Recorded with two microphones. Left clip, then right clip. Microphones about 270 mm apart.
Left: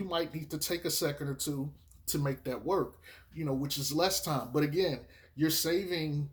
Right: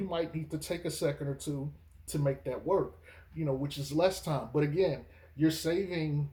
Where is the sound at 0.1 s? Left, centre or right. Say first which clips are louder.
Left 2 dB; left.